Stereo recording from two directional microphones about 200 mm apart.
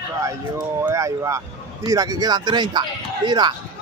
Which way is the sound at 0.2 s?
15° right (ahead or behind).